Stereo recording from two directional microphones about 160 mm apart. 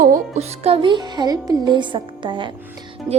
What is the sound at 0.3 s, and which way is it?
Speech, 40° right (ahead or behind).